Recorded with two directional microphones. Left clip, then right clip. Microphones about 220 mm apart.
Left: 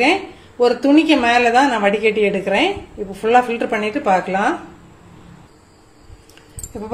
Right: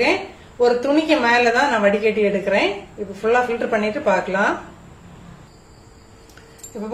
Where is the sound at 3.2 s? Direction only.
35° left (ahead or behind).